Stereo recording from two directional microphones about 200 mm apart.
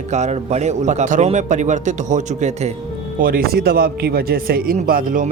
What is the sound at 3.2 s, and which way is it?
A man's voice, 45° right (ahead or behind).